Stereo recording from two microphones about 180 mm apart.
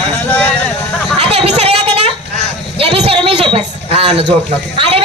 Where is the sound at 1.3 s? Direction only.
35° right (ahead or behind).